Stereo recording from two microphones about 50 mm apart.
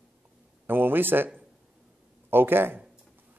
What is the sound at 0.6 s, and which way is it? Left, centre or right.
Speech, right.